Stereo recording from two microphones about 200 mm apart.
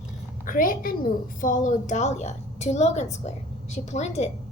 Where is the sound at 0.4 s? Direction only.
45° left (ahead or behind).